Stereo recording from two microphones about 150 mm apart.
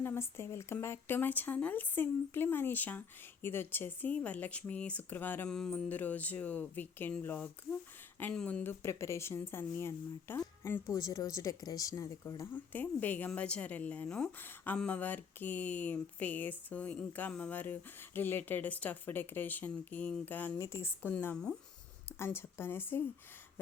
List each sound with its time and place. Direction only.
0.0 s speech: 15° left (ahead or behind)